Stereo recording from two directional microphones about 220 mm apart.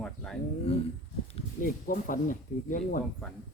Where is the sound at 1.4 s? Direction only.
40° left (ahead or behind).